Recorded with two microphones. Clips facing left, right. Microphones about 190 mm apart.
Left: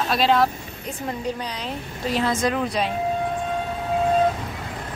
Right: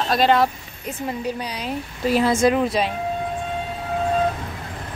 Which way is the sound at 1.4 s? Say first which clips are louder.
Right 2 dB; 10° right (ahead or behind).